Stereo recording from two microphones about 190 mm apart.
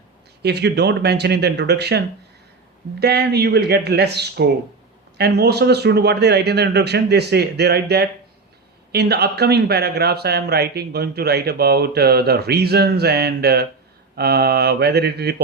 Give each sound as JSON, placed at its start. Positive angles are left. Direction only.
{"t": 0.4, "sound": "speech", "side_deg": -60}